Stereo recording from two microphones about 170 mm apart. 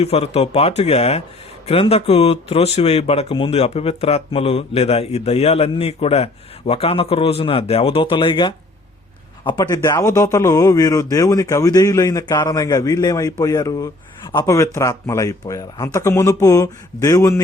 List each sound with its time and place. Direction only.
0.0 s a man's voice: 40° left (ahead or behind); by 17.4 s 20° left (ahead or behind)